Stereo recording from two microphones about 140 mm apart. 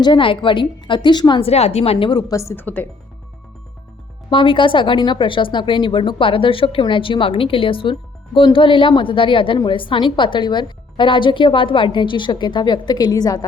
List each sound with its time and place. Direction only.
0.0 s speech: 35° left (ahead or behind)
2.0 s a woman's voice: 25° left (ahead or behind)
4.3 s speech: 35° left (ahead or behind)